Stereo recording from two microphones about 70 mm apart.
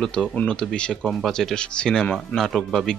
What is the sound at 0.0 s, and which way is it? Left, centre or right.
Speech, centre.